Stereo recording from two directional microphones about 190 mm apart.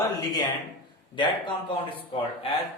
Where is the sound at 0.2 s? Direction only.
20° left (ahead or behind).